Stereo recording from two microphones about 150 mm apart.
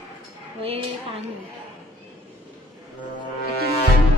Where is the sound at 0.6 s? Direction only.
40° right (ahead or behind).